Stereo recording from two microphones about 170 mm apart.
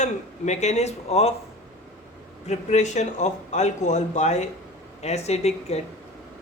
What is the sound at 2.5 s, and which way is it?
Speech, 40° left (ahead or behind).